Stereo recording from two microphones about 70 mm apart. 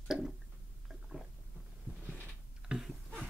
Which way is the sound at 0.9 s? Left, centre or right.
Centre.